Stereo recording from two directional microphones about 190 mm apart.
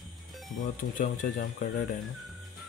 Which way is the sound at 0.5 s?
45° left (ahead or behind).